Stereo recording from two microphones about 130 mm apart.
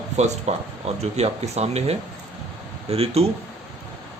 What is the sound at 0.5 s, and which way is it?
Speech, 60° right (ahead or behind).